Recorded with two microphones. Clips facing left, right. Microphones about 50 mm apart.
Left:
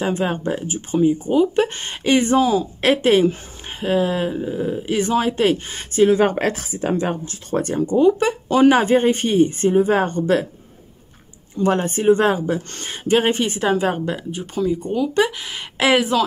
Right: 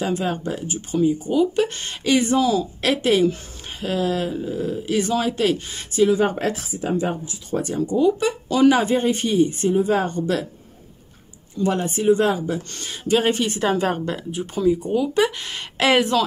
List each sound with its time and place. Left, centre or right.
0.0 s speech: left
6.1 s speech: left
7.7 s speech: left
11.5 s speech: left
13.6 s speech: centre